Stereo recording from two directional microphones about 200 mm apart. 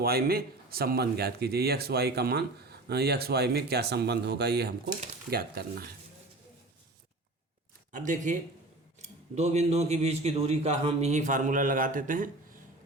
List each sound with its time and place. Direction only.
0.0 s speech: 50° right (ahead or behind)
7.9 s speech: 40° right (ahead or behind)